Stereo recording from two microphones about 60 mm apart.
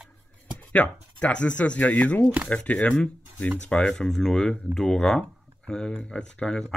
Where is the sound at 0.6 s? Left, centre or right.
Left.